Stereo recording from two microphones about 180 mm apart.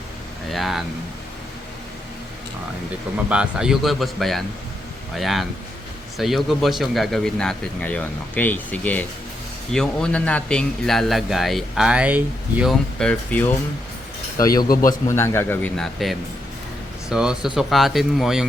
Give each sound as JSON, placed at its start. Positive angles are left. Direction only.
{"t": 0.5, "sound": "a man's voice", "side_deg": 0}
{"t": 3.2, "sound": "a man's voice", "side_deg": -5}
{"t": 13.0, "sound": "speech", "side_deg": 5}
{"t": 14.3, "sound": "speech", "side_deg": 20}
{"t": 14.7, "sound": "a man's voice", "side_deg": 50}
{"t": 15.0, "sound": "a man's voice", "side_deg": 15}